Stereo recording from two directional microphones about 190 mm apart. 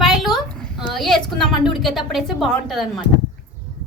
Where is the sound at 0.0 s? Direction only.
Centre (ahead or behind).